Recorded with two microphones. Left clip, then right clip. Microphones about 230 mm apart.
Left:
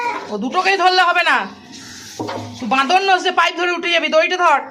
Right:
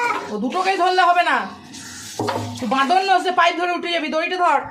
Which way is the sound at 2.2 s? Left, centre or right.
Right.